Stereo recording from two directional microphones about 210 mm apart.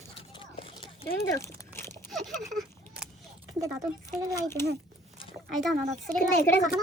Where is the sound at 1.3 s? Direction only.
10° left (ahead or behind).